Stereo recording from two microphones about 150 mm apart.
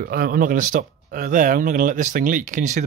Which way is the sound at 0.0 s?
75° right (ahead or behind).